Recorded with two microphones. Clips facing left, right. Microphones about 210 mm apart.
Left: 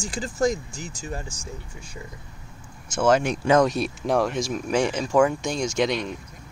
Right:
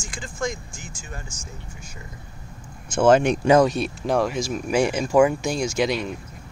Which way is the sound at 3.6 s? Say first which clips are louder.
Right 2 dB; centre (ahead or behind).